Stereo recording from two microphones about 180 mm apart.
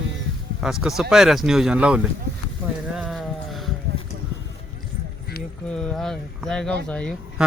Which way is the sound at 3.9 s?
60° right (ahead or behind).